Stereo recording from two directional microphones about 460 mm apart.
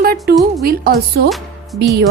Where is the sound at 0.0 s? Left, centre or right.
Centre.